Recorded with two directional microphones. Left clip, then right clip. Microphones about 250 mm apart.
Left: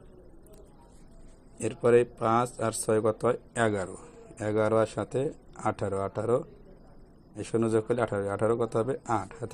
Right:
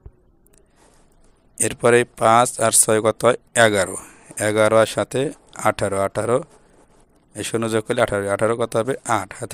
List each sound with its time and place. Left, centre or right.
1.6 s speech: right
2.8 s speech: right